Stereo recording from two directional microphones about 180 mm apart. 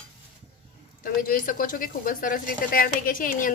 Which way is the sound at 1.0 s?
50° left (ahead or behind).